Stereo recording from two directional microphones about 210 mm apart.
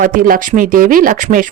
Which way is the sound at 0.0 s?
40° right (ahead or behind).